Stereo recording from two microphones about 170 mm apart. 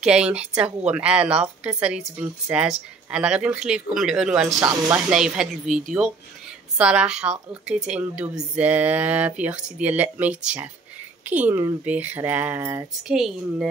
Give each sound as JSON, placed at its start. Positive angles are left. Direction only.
{"t": 0.0, "sound": "a woman's voice", "side_deg": -5}
{"t": 4.6, "sound": "speech", "side_deg": -20}
{"t": 4.9, "sound": "a woman's voice", "side_deg": -5}